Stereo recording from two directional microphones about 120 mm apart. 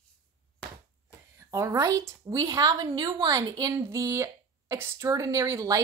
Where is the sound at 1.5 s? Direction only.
25° right (ahead or behind).